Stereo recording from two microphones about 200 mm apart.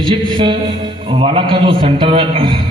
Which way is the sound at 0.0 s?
25° right (ahead or behind).